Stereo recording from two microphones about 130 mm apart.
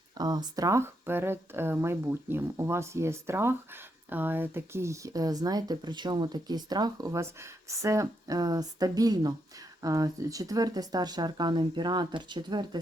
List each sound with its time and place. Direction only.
0.2 s speech: 30° right (ahead or behind)